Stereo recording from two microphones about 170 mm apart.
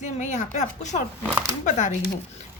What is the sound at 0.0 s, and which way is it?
A woman's voice, 45° left (ahead or behind).